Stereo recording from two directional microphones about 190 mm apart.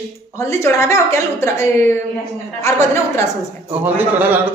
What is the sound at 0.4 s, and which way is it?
A woman's voice, 15° left (ahead or behind).